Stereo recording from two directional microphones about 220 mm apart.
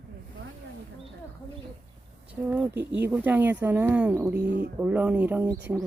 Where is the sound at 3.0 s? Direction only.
10° right (ahead or behind).